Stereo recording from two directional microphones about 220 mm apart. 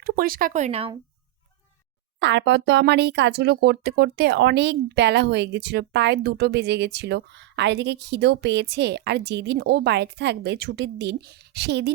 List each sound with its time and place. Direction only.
0.0 s speech: 40° right (ahead or behind); by 0.9 s 25° right (ahead or behind)
2.1 s speech: 55° right (ahead or behind)